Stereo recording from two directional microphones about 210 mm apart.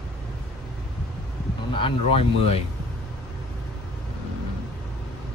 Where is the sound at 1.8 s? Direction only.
25° left (ahead or behind).